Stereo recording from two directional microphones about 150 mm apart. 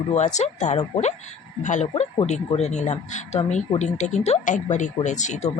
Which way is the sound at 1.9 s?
45° left (ahead or behind).